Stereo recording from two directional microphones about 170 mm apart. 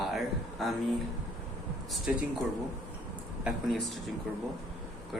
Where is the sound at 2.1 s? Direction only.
10° right (ahead or behind).